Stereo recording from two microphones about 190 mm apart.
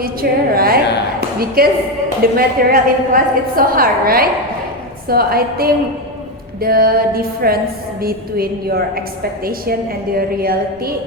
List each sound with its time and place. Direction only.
0.0 s a woman's voice: 50° right (ahead or behind)